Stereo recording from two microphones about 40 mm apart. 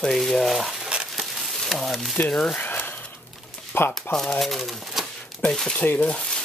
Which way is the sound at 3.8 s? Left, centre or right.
Left.